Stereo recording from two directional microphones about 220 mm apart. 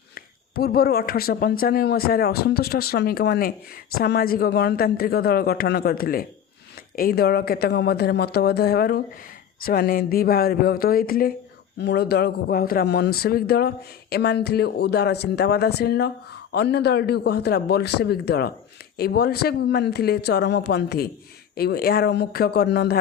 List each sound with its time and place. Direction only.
0.1 s speech: 45° left (ahead or behind)